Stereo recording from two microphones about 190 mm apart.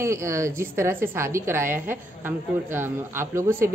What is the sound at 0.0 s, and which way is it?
A woman's voice, 15° right (ahead or behind).